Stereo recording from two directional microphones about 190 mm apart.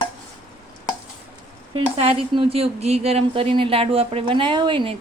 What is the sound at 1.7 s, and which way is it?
A woman's voice, 30° right (ahead or behind).